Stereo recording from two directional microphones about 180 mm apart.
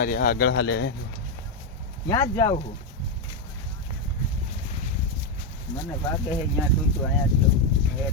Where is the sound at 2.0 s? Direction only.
20° left (ahead or behind).